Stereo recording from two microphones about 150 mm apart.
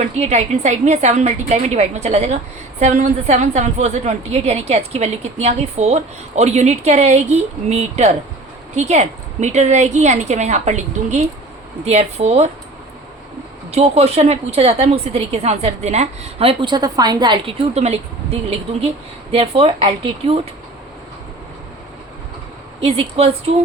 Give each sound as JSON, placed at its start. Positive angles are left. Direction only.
{"t": 0.0, "sound": "a woman's voice", "side_deg": -45}
{"t": 13.7, "sound": "a woman's voice", "side_deg": -45}
{"t": 22.8, "sound": "speech", "side_deg": -40}